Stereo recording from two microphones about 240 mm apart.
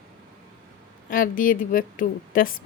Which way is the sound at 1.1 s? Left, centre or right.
Left.